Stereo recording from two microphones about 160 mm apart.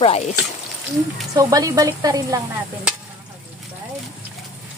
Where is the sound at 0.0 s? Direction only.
40° left (ahead or behind).